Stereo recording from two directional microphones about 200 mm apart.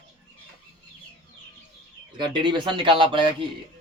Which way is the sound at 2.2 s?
25° right (ahead or behind).